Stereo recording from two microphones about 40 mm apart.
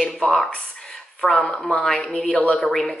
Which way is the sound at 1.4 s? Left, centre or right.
Left.